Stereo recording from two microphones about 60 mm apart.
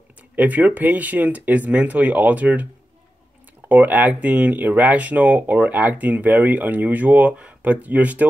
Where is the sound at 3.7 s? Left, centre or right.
Right.